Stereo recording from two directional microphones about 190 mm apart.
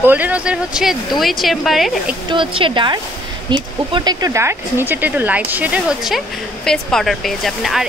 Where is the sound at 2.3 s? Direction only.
25° right (ahead or behind).